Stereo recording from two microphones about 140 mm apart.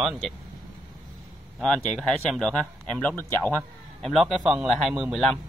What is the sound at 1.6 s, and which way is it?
Speech, 5° left (ahead or behind).